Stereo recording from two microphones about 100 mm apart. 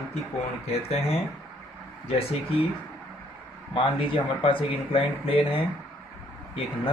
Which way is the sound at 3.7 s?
65° left (ahead or behind).